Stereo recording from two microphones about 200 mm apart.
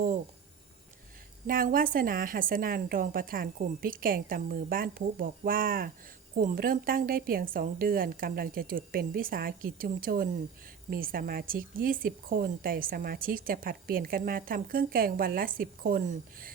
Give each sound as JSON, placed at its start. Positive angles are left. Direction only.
{"t": 1.5, "sound": "speech", "side_deg": -45}